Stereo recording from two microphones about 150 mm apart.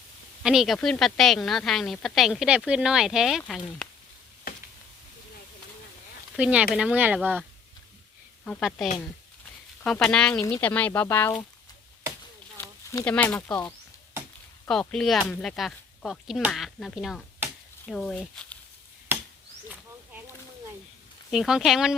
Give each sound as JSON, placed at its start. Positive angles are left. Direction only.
{"t": 0.4, "sound": "a woman's voice", "side_deg": 0}
{"t": 6.3, "sound": "speech", "side_deg": -10}
{"t": 9.8, "sound": "a woman's voice", "side_deg": 5}
{"t": 12.5, "sound": "a sound", "side_deg": 20}
{"t": 13.1, "sound": "a woman's voice", "side_deg": 10}
{"t": 21.2, "sound": "a woman's voice", "side_deg": -5}